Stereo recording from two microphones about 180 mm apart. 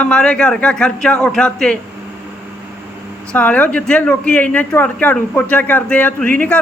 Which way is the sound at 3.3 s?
10° left (ahead or behind).